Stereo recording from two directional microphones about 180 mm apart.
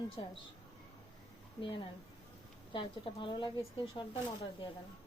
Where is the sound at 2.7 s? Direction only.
25° left (ahead or behind).